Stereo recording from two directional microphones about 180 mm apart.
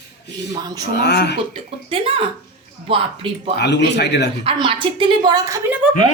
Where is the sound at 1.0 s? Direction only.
65° left (ahead or behind).